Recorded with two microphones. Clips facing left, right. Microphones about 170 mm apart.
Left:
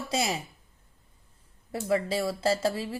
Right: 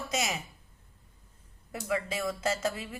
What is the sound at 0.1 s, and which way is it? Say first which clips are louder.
Speech: left 4 dB; 30° left (ahead or behind).